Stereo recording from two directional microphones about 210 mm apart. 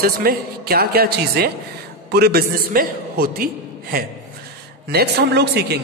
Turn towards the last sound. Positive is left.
turn(degrees=-50)  # may be behind; listen again after turning